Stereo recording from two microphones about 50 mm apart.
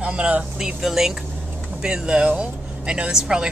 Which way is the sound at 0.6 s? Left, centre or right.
Centre.